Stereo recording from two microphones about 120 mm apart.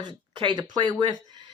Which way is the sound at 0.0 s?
40° right (ahead or behind).